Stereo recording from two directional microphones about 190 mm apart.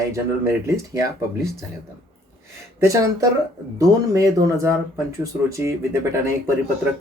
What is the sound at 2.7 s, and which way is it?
Speech, 15° right (ahead or behind).